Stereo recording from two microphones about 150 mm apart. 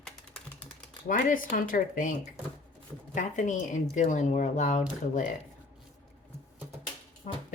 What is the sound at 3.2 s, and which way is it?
Speech, 60° left (ahead or behind).